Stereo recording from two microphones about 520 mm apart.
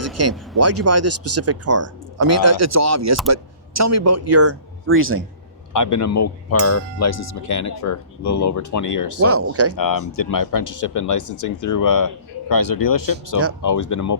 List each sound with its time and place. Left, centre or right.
0.2 s speech: right
5.7 s speech: left
9.2 s speech: right
9.7 s speech: left